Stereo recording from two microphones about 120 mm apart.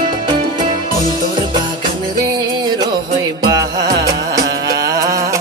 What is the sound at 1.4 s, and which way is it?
Music, 40° right (ahead or behind).